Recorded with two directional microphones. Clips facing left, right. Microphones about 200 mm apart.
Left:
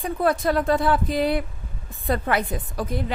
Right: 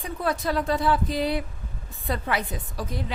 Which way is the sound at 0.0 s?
50° left (ahead or behind).